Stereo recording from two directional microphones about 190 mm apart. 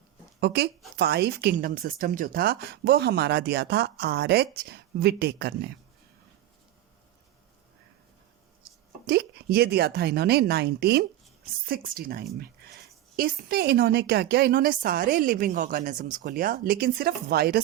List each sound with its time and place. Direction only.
0.3 s a woman's voice: 60° right (ahead or behind)
9.0 s a woman's voice: 55° right (ahead or behind)